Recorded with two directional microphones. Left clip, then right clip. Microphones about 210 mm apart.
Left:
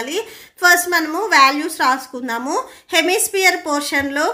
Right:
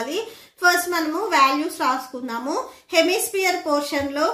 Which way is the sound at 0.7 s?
45° left (ahead or behind).